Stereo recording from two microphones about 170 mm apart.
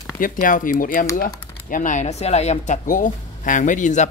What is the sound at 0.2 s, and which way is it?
Speech, 50° left (ahead or behind).